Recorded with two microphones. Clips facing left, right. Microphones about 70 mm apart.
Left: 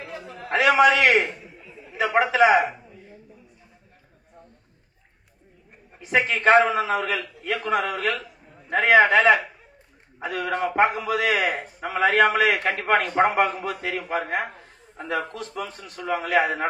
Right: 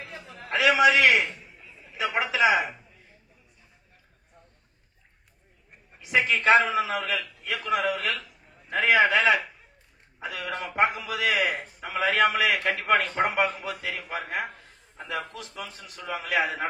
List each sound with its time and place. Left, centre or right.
0.5 s a man's voice: left
5.9 s a man's voice: left
14.0 s a man's voice: left